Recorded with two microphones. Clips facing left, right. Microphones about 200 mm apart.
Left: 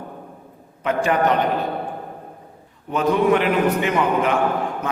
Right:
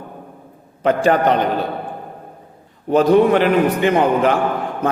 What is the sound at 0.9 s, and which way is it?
Speech, 35° right (ahead or behind).